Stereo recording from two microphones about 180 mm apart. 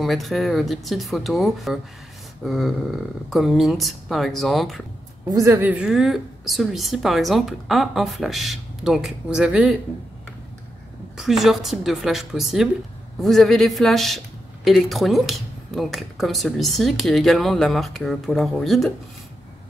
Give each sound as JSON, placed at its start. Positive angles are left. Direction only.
{"t": 0.0, "sound": "speech", "side_deg": 0}
{"t": 5.3, "sound": "speech", "side_deg": -15}
{"t": 11.1, "sound": "speech", "side_deg": 0}